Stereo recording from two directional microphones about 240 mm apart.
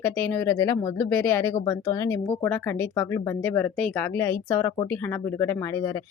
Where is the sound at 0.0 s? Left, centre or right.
Centre.